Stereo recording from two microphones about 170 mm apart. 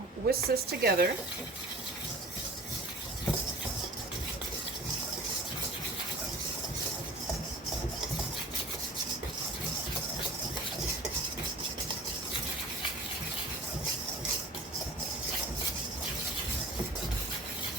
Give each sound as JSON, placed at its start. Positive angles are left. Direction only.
{"t": 0.3, "sound": "speech", "side_deg": -65}